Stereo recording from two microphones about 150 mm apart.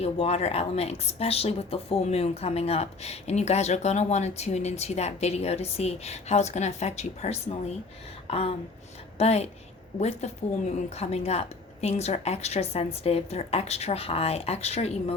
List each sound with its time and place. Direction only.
0.0 s speech: 45° left (ahead or behind)
8.3 s a sound: 40° left (ahead or behind)
9.1 s speech: 45° left (ahead or behind)